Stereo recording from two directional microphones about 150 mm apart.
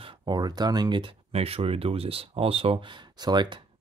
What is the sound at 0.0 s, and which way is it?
Speech, 30° right (ahead or behind).